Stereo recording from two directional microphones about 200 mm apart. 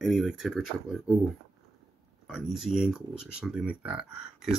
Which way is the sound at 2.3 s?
5° left (ahead or behind).